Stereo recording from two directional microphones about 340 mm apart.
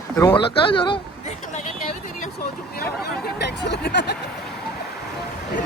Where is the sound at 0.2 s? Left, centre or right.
Centre.